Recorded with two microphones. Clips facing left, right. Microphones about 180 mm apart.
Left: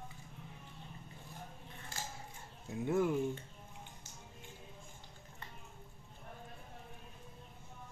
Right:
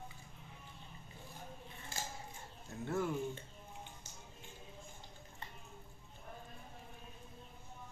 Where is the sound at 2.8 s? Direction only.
15° left (ahead or behind).